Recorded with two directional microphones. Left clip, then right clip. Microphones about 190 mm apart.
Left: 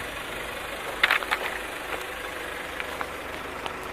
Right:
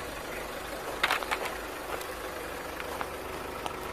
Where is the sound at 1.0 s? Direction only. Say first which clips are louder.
Left 6 dB; 5° left (ahead or behind).